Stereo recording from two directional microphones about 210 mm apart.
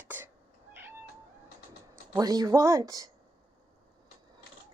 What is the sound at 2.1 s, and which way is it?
Speech, 20° right (ahead or behind).